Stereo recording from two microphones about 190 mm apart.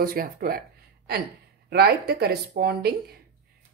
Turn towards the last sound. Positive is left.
turn(degrees=-55)  # may be behind; listen again after turning